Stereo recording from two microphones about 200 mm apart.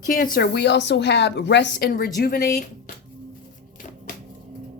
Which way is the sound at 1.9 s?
45° left (ahead or behind).